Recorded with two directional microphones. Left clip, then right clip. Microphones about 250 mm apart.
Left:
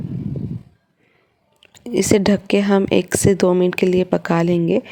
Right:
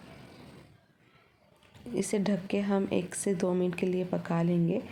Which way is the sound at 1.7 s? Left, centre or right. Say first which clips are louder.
Left 15 dB; left.